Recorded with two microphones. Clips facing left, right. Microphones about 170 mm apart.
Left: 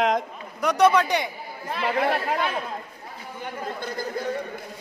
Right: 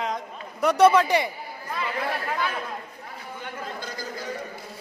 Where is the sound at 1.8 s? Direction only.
60° left (ahead or behind).